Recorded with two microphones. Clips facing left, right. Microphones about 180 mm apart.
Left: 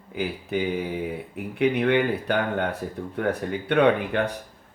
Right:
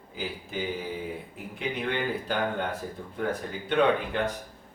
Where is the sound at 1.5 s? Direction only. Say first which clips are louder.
Left 10 dB; 65° left (ahead or behind).